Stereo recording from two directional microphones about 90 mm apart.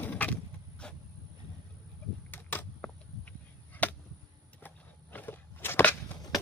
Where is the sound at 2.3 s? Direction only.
25° left (ahead or behind).